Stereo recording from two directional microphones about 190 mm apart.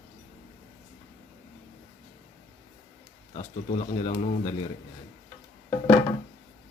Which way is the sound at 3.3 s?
20° left (ahead or behind).